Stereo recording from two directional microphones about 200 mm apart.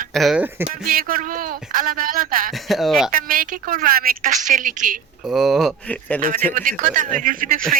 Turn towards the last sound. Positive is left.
turn(degrees=-40)  # may be behind; listen again after turning